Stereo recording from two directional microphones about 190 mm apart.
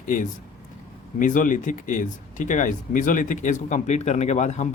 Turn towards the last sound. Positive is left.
turn(degrees=40)  # may be behind; listen again after turning